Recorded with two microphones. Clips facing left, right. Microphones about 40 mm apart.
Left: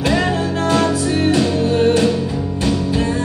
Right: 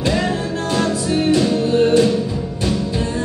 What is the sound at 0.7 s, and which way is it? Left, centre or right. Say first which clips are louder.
Music: left 3 dB; left.